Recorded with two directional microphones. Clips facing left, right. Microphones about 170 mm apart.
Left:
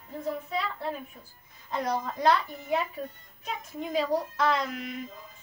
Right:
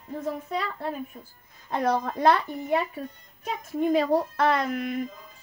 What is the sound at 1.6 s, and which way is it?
Speech, 55° right (ahead or behind).